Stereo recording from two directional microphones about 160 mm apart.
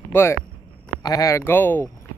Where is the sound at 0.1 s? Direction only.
15° left (ahead or behind).